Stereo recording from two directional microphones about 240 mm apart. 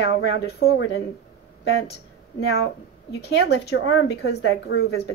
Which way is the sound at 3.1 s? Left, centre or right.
Left.